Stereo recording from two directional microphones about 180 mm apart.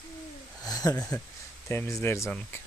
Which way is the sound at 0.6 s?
20° left (ahead or behind).